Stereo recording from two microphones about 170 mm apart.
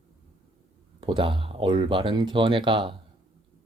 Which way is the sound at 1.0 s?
30° right (ahead or behind).